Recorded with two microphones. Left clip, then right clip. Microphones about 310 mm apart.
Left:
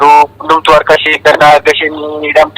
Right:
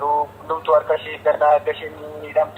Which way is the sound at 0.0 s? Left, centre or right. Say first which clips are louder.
Left 16 dB; left.